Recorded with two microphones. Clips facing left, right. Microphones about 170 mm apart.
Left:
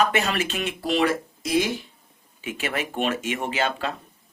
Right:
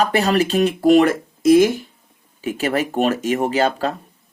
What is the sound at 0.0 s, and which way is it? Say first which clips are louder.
Speech: right 6 dB; 35° right (ahead or behind).